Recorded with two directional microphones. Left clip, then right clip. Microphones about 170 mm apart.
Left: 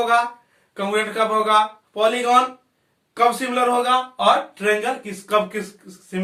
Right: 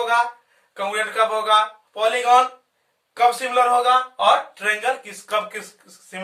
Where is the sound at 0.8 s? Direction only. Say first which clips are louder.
Even; 20° right (ahead or behind).